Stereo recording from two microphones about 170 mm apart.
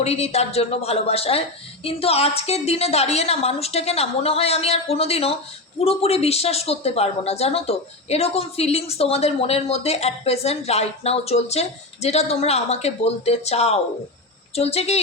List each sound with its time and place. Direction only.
0.0 s a woman's voice: 40° left (ahead or behind)